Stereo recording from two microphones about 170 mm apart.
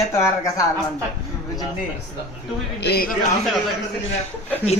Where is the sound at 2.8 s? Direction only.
65° left (ahead or behind).